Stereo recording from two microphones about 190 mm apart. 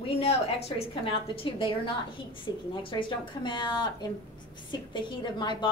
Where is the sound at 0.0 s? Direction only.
35° left (ahead or behind).